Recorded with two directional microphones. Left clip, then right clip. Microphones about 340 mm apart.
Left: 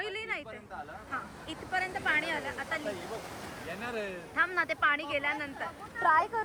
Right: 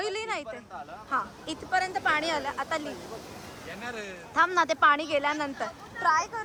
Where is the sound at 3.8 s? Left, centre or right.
Left.